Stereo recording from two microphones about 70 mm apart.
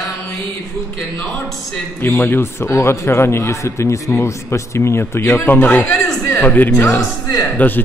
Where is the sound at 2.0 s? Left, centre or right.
Left.